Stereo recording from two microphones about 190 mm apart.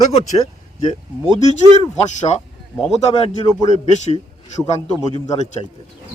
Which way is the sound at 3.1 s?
20° left (ahead or behind).